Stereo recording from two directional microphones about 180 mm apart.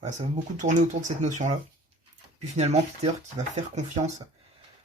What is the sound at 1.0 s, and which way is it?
Speech, 40° right (ahead or behind).